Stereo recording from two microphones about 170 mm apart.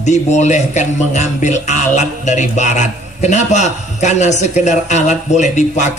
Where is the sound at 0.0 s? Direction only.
45° left (ahead or behind).